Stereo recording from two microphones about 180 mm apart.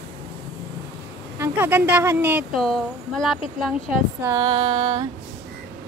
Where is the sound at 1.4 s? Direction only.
10° right (ahead or behind).